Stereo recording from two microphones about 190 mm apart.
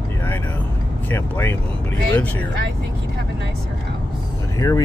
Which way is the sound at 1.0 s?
10° left (ahead or behind).